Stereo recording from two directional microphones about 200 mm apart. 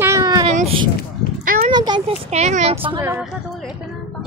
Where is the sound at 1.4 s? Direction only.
45° right (ahead or behind).